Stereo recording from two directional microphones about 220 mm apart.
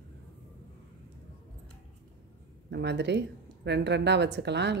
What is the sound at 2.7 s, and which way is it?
A woman's voice, 50° right (ahead or behind).